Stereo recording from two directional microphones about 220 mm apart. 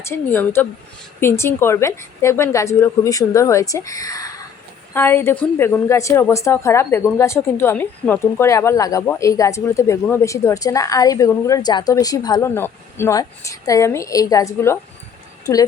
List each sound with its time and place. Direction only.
0.0 s a woman's voice: 10° left (ahead or behind)